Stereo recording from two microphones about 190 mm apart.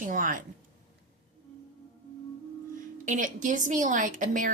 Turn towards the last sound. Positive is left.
turn(degrees=-45)  # may be behind; listen again after turning